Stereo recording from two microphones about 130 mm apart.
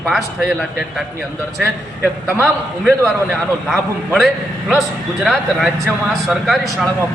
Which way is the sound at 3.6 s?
Centre (ahead or behind).